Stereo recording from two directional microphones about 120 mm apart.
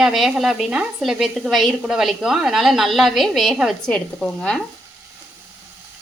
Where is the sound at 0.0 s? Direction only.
Centre (ahead or behind).